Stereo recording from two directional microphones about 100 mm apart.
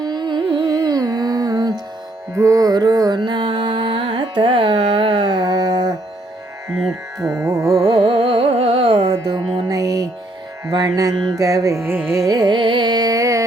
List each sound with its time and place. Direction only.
0.0 s music: 45° right (ahead or behind)
3.2 s carnatic music: 50° right (ahead or behind)
5.5 s a sound: 45° right (ahead or behind)
7.4 s music: 35° right (ahead or behind)
8.0 s carnatic music: 70° right (ahead or behind)
9.0 s music: 40° right (ahead or behind)
11.3 s carnatic music: 35° right (ahead or behind)